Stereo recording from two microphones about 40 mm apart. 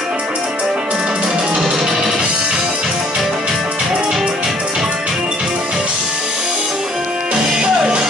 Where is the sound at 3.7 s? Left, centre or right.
Centre.